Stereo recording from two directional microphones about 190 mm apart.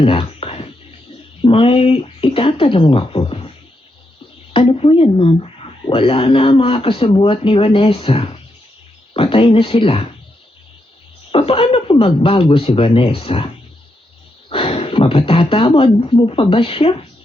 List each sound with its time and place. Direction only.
0.0 s a sound: 30° left (ahead or behind)
4.5 s speech: 30° left (ahead or behind)
11.3 s speech: 30° left (ahead or behind)
14.5 s speech: 30° left (ahead or behind)